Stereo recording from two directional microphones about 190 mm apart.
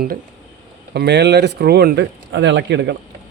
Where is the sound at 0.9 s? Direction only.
65° right (ahead or behind).